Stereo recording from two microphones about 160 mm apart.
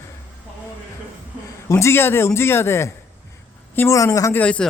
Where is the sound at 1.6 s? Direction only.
15° left (ahead or behind).